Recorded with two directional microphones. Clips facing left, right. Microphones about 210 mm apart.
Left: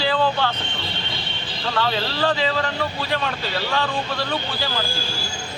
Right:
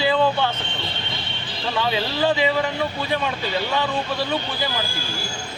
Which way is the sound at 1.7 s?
15° right (ahead or behind).